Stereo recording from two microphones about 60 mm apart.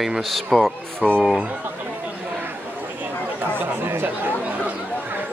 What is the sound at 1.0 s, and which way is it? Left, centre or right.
Speech, centre.